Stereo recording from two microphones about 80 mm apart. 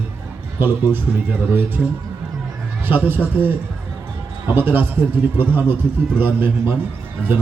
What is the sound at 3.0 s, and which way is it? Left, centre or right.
A man's voice, right.